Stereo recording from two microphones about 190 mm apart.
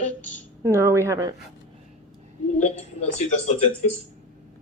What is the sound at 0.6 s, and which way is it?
Speech, 15° right (ahead or behind).